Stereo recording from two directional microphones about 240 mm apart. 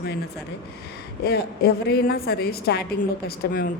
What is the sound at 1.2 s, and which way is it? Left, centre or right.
Speech, left.